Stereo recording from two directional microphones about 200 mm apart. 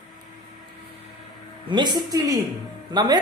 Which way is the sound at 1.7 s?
20° right (ahead or behind).